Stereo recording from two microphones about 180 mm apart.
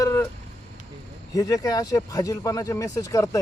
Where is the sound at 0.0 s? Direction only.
15° left (ahead or behind).